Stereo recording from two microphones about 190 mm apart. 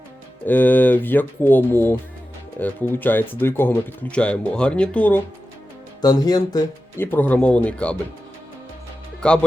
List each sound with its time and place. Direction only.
0.4 s speech: 10° left (ahead or behind)
6.0 s speech: 20° left (ahead or behind)
7.0 s speech: 10° left (ahead or behind)
9.2 s speech: 5° left (ahead or behind)